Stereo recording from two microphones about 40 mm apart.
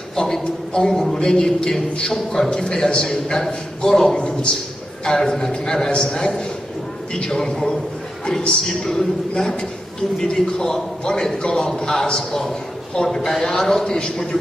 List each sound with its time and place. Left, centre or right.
0.1 s a man's voice: centre
8.8 s a man's voice: centre